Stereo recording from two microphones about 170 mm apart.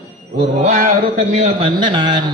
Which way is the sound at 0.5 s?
45° right (ahead or behind).